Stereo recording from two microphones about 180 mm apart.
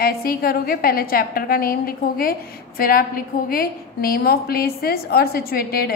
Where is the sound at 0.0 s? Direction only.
55° left (ahead or behind).